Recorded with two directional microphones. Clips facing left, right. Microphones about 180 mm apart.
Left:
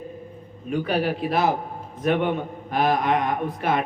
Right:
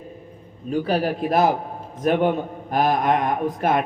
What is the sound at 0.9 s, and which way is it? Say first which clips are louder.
Speech: right 2 dB; 45° right (ahead or behind).